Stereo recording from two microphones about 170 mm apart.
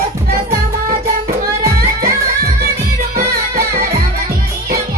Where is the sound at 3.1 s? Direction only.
60° right (ahead or behind).